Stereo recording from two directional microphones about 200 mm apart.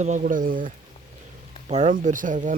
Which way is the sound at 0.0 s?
40° right (ahead or behind).